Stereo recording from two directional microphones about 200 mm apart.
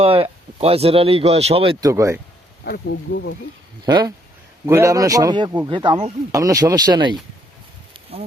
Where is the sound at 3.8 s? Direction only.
20° right (ahead or behind).